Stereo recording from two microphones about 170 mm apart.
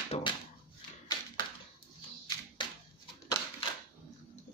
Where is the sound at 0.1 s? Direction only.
40° left (ahead or behind).